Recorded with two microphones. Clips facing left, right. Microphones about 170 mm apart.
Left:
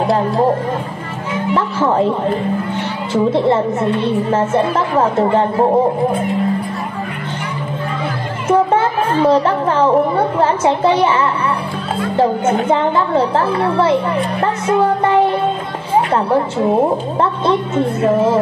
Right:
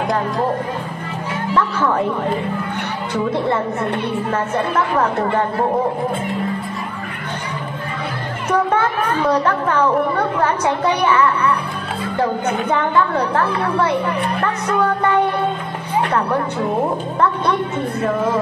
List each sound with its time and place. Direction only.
1.5 s a woman's voice: 25° left (ahead or behind)
3.3 s a woman's voice: 25° left (ahead or behind)
8.5 s a woman's voice: 25° left (ahead or behind)